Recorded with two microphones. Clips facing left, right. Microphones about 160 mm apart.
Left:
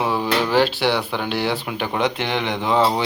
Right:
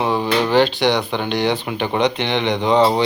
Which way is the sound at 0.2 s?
15° right (ahead or behind).